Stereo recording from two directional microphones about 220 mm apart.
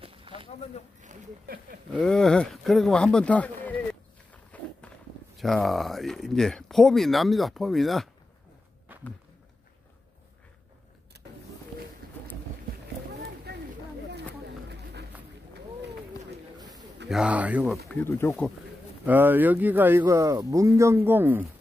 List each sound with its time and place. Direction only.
0.0 s a sound: 25° right (ahead or behind)
1.0 s speech: 40° right (ahead or behind)
2.0 s speech: centre (ahead or behind)
4.5 s walk: 5° left (ahead or behind)
5.4 s speech: centre (ahead or behind)
13.5 s chatter: 50° right (ahead or behind)
17.1 s speech: 5° right (ahead or behind)
17.8 s speech: 10° left (ahead or behind)
19.0 s speech: 10° right (ahead or behind)